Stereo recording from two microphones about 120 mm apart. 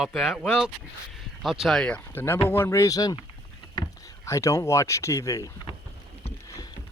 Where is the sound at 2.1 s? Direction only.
20° left (ahead or behind).